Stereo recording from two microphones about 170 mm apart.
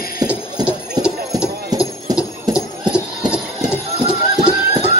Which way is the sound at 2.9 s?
5° right (ahead or behind).